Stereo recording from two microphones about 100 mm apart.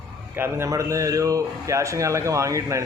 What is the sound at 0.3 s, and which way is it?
Speech, 25° right (ahead or behind).